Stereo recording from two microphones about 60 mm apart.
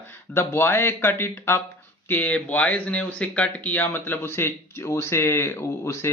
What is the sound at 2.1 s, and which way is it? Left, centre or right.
Speech, left.